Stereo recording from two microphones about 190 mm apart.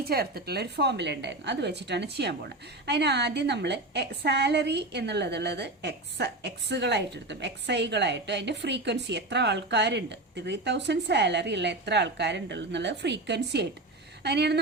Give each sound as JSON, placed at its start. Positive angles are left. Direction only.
{"t": 0.0, "sound": "a woman's voice", "side_deg": -55}